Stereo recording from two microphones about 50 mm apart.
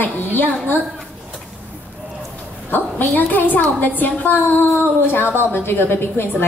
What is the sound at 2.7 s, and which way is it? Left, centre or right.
A woman's voice, left.